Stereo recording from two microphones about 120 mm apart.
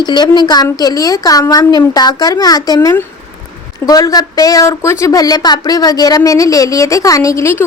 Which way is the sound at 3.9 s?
30° left (ahead or behind).